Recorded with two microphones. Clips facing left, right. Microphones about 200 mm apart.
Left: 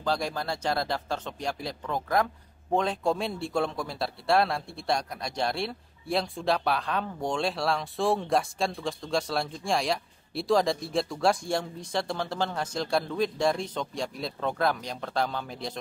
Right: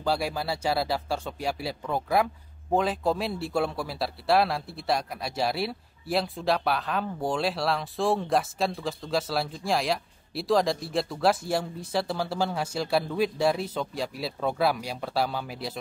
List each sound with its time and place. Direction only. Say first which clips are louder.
0.0 s speech: right 2 dB; 10° right (ahead or behind)